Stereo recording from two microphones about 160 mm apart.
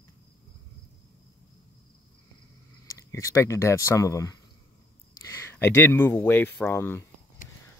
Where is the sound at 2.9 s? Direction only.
20° left (ahead or behind).